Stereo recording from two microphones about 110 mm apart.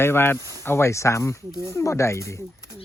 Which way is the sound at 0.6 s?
20° left (ahead or behind).